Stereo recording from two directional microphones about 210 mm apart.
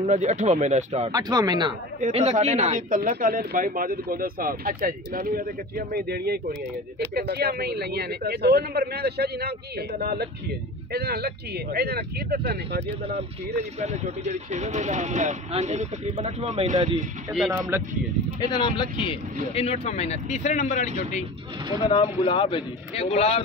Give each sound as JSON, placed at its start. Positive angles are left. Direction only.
{"t": 0.0, "sound": "speech", "side_deg": -30}
{"t": 1.1, "sound": "speech", "side_deg": -20}
{"t": 2.0, "sound": "speech", "side_deg": -35}
{"t": 13.6, "sound": "speech", "side_deg": -30}
{"t": 17.5, "sound": "speech", "side_deg": -10}
{"t": 18.4, "sound": "a man's voice", "side_deg": 20}
{"t": 21.8, "sound": "a man's voice", "side_deg": 25}